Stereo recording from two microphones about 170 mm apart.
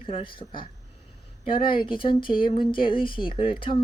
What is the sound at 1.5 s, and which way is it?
Speech, 60° left (ahead or behind).